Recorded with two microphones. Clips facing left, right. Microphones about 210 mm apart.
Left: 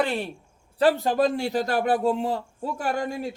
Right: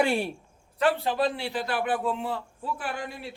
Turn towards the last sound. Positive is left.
turn(degrees=45)  # may be behind; listen again after turning